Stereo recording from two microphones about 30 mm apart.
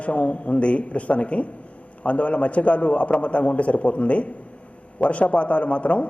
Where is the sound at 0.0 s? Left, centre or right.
Left.